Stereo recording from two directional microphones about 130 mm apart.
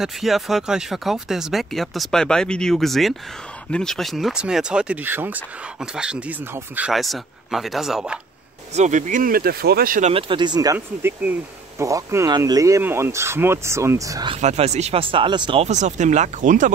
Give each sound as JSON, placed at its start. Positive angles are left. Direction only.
{"t": 0.0, "sound": "speech", "side_deg": 0}
{"t": 6.9, "sound": "speech", "side_deg": 0}
{"t": 8.7, "sound": "speech", "side_deg": -65}
{"t": 10.1, "sound": "speech", "side_deg": -40}
{"t": 14.4, "sound": "speech", "side_deg": -60}
{"t": 15.6, "sound": "speech", "side_deg": -65}